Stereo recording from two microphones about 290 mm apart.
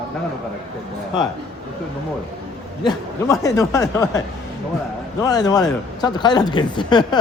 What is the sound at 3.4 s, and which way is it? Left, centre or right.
Speech, centre.